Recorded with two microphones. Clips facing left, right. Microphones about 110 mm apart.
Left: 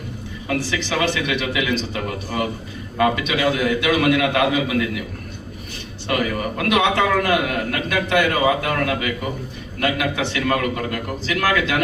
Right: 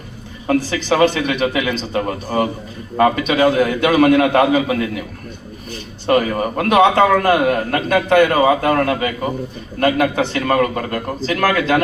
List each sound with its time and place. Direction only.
0.4 s a man's voice: 40° right (ahead or behind)
6.1 s a man's voice: 40° right (ahead or behind)